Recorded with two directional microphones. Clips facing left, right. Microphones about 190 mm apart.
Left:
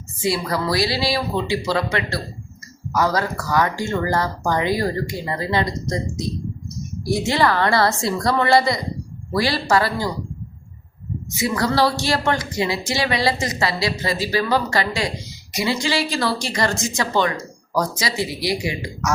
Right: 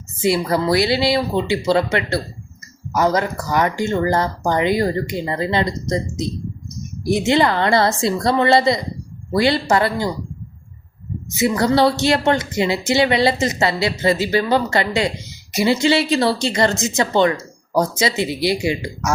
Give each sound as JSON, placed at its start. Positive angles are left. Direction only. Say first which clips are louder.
{"t": 0.2, "sound": "speech", "louder": "right 4 dB", "side_deg": -25}
{"t": 7.0, "sound": "speech", "louder": "right 3 dB", "side_deg": -20}
{"t": 11.3, "sound": "speech", "louder": "right 4 dB", "side_deg": -25}